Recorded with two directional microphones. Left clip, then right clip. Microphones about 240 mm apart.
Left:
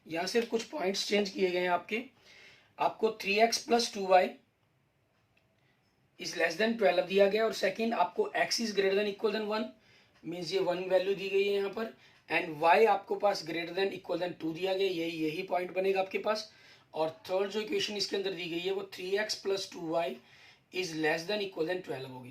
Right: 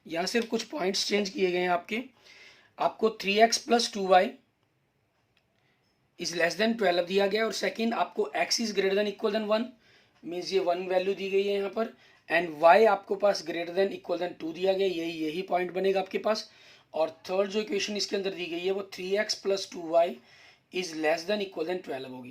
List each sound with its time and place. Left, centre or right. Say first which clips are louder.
0.1 s speech: right 2 dB; right
6.1 s speech: right 3 dB; right